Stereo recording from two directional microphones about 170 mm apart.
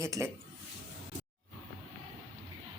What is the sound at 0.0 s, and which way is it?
Speech, 15° right (ahead or behind).